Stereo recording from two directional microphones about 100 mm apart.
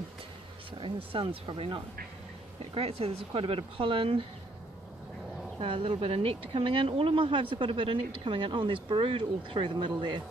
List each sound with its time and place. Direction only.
0.7 s speech: 60° right (ahead or behind)
2.6 s speech: 70° right (ahead or behind)
5.6 s speech: 60° right (ahead or behind)